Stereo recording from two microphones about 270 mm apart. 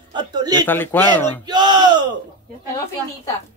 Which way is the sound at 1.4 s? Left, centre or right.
Centre.